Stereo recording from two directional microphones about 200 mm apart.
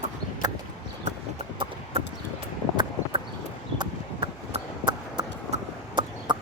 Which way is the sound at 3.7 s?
25° right (ahead or behind).